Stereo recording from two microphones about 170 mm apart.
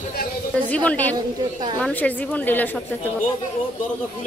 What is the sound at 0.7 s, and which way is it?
A woman's voice, 10° left (ahead or behind).